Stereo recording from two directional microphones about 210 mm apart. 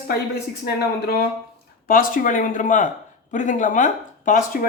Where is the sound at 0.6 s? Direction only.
45° left (ahead or behind).